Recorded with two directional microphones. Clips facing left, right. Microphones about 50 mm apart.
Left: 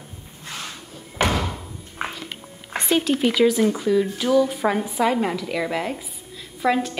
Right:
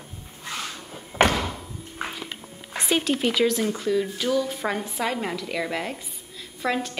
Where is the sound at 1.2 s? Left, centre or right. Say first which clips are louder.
Right 2 dB; right.